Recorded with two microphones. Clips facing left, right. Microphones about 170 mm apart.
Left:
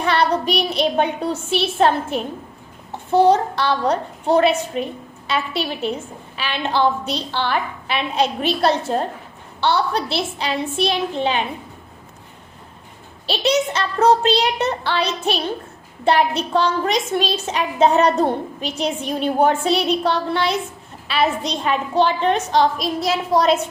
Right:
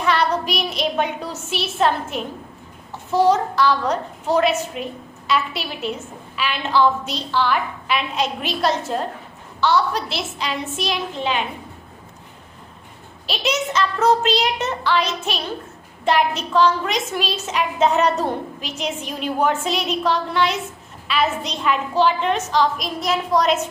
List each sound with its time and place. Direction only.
0.0 s child singing: 30° left (ahead or behind)
3.1 s a woman's voice: 30° left (ahead or behind)
13.2 s a woman's voice: 30° left (ahead or behind)